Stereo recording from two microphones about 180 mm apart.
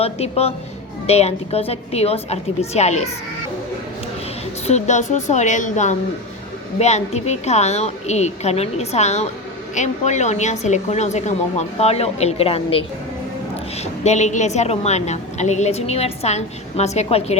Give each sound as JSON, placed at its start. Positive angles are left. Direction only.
{"t": 0.0, "sound": "a woman's voice", "side_deg": 35}
{"t": 4.6, "sound": "a woman's voice", "side_deg": 40}
{"t": 13.8, "sound": "a woman's voice", "side_deg": 40}